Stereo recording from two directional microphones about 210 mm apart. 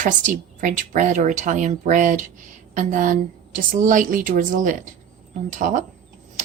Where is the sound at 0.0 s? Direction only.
40° right (ahead or behind).